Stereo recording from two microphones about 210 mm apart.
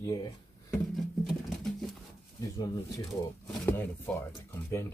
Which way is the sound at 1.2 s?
Centre (ahead or behind).